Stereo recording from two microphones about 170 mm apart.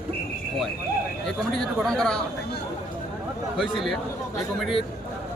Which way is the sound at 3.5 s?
Centre (ahead or behind).